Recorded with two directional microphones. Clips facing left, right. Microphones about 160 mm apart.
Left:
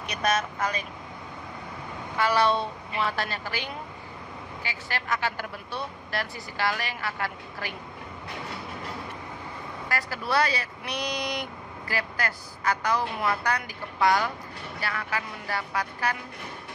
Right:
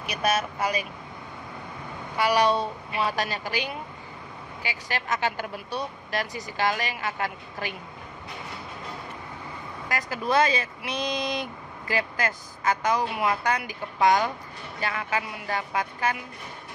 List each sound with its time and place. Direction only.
0.0 s a woman's voice: 5° right (ahead or behind)
2.1 s a woman's voice: 15° right (ahead or behind)
9.8 s a woman's voice: 20° right (ahead or behind)